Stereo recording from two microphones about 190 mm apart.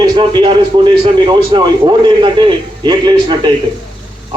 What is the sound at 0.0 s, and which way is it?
A man's voice, 25° right (ahead or behind).